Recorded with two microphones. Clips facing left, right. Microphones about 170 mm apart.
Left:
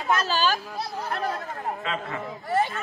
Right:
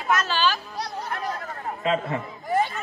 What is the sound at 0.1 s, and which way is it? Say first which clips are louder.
Speech: even; 35° left (ahead or behind).